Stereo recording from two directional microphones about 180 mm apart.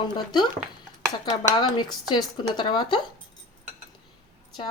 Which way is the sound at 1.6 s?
25° left (ahead or behind).